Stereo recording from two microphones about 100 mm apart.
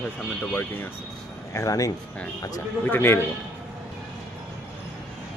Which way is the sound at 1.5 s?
35° left (ahead or behind).